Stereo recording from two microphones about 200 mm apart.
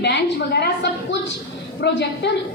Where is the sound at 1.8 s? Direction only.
55° left (ahead or behind).